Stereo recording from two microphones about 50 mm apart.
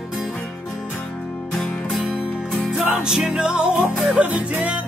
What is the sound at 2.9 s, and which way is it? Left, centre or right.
Music, centre.